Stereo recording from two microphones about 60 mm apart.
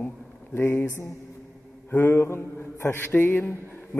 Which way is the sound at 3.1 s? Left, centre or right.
Left.